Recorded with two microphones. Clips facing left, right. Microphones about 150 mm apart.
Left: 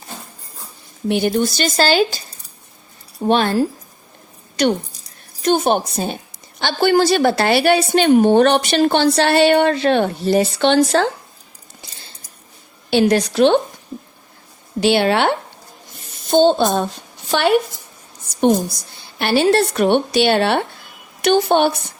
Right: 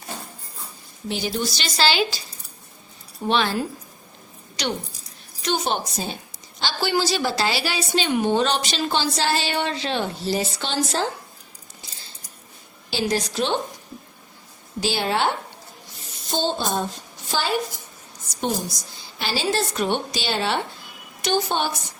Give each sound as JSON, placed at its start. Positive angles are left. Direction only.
{"t": 1.0, "sound": "speech", "side_deg": 60}
{"t": 3.2, "sound": "a woman's voice", "side_deg": 50}
{"t": 12.9, "sound": "a woman's voice", "side_deg": 60}
{"t": 14.8, "sound": "a woman's voice", "side_deg": 65}